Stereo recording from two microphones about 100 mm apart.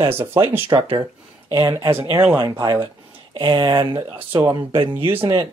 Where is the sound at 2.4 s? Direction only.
50° right (ahead or behind).